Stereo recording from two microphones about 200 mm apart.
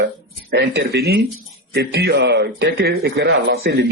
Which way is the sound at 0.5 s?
55° right (ahead or behind).